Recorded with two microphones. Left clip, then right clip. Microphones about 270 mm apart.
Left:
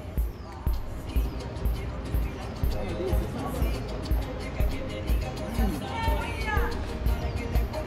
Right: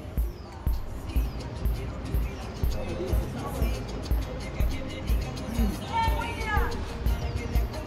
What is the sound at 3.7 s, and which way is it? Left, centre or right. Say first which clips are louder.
Music: left 1 dB; left.